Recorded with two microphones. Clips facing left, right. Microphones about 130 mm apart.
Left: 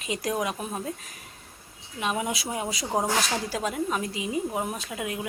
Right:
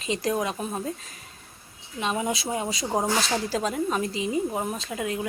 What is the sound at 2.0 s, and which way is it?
A woman's voice, 10° left (ahead or behind).